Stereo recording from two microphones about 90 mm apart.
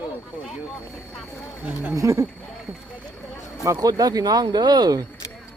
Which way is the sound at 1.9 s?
35° right (ahead or behind).